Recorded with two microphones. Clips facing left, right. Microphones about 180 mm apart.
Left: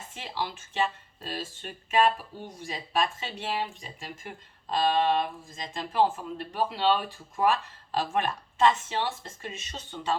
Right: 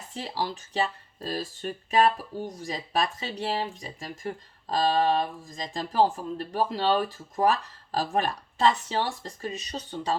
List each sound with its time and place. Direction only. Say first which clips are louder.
0.1 s speech: right 3 dB; 35° right (ahead or behind)